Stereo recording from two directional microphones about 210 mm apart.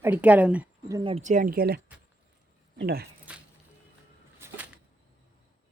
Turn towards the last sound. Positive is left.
turn(degrees=-10)  # may be behind; listen again after turning